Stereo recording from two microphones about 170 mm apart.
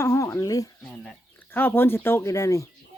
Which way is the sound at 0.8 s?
5° left (ahead or behind).